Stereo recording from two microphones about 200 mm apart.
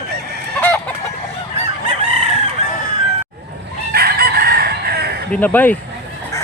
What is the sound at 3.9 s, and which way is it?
Chicken, 50° right (ahead or behind).